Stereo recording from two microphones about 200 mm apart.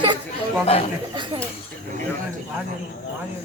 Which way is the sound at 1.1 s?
25° right (ahead or behind).